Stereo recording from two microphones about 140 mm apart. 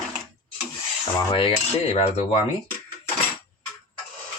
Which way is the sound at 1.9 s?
55° left (ahead or behind).